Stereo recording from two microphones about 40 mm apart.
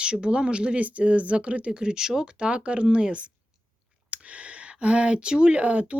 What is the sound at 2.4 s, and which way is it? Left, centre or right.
Speech, right.